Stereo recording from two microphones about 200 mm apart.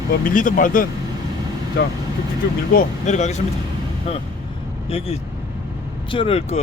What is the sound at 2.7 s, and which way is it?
Speech, 40° left (ahead or behind).